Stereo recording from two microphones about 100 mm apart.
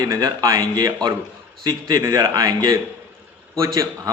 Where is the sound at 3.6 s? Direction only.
30° right (ahead or behind).